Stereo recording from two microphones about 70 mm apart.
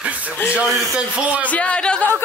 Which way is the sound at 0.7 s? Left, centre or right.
Centre.